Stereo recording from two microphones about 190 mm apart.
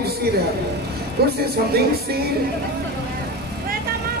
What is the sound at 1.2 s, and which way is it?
A man's voice, 55° right (ahead or behind).